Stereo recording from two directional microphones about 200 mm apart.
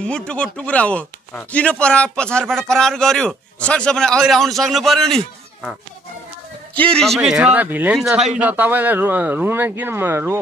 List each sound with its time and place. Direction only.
0.0 s speech: 5° left (ahead or behind); by 10.4 s 10° right (ahead or behind)